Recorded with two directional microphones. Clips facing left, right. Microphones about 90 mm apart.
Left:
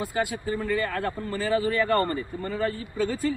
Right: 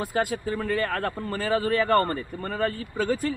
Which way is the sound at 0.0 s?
55° right (ahead or behind).